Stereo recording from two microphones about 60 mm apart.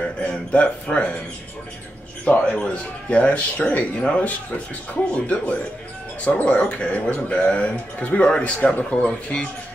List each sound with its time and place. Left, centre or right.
0.2 s speech: centre
2.2 s a man's voice: left